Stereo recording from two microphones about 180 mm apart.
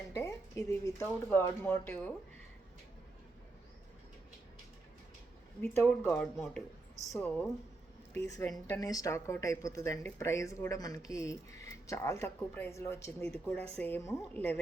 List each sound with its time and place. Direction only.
0.1 s a woman's voice: 15° left (ahead or behind)
5.6 s a woman's voice: 10° left (ahead or behind)